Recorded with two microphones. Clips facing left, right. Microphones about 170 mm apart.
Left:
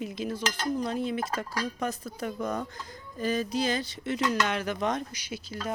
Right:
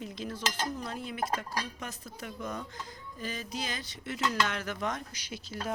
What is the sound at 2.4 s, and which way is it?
Speech, 60° left (ahead or behind).